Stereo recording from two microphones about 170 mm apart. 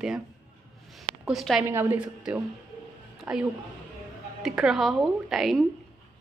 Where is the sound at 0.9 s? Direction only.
Centre (ahead or behind).